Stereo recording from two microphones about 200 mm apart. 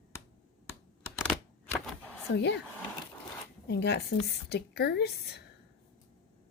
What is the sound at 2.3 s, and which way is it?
Speech, 60° left (ahead or behind).